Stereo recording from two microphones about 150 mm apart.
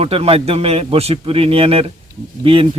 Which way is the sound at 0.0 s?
40° right (ahead or behind).